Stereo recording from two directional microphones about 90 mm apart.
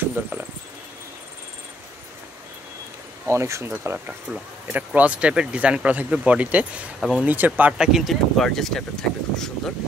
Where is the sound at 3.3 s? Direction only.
30° right (ahead or behind).